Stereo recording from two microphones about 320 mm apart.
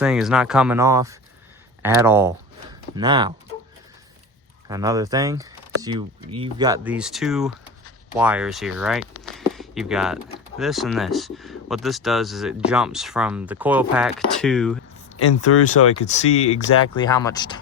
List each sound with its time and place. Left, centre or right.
0.0 s speech: centre
4.7 s speech: centre
15.5 s speech: left
17.0 s speech: centre